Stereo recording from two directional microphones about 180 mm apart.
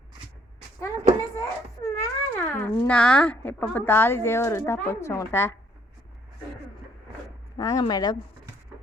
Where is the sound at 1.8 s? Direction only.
15° left (ahead or behind).